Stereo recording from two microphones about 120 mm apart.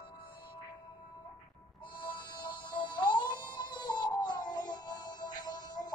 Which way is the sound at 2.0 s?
40° left (ahead or behind).